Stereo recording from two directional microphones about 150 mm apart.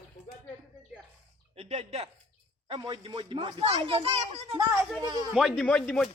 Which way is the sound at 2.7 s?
30° right (ahead or behind).